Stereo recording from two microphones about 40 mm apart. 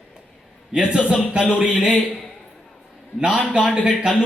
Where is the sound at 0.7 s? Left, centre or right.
Right.